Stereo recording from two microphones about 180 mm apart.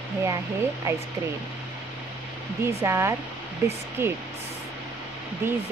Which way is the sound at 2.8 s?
15° right (ahead or behind).